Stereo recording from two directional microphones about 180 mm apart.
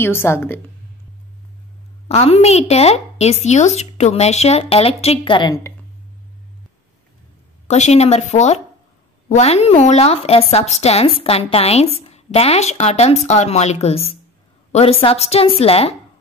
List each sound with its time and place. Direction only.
0.0 s a woman's voice: 15° left (ahead or behind)
2.0 s speech: 35° left (ahead or behind)
7.6 s speech: 40° left (ahead or behind)